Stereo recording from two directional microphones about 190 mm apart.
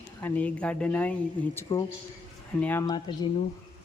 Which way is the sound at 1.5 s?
20° left (ahead or behind).